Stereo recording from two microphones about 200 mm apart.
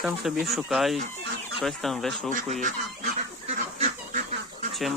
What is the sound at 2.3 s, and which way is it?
Fowl, 40° right (ahead or behind).